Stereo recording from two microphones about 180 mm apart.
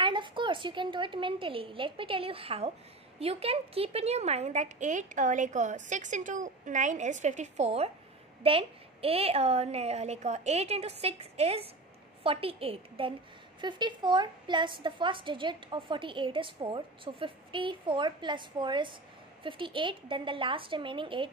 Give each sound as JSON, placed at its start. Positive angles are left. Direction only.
{"t": 0.0, "sound": "a woman's voice", "side_deg": -25}